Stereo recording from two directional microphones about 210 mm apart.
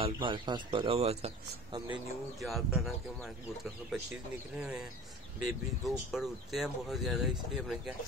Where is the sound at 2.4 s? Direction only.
Centre (ahead or behind).